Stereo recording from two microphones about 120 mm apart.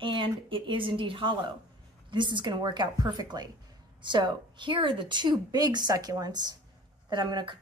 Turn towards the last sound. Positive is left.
turn(degrees=-40)  # may be behind; listen again after turning